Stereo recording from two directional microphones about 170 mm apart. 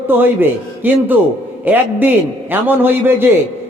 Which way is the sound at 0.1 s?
10° right (ahead or behind).